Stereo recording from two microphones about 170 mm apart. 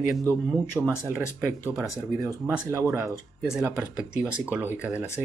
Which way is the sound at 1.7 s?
15° right (ahead or behind).